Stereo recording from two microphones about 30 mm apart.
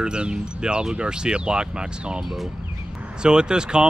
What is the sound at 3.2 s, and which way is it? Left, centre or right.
Speech, right.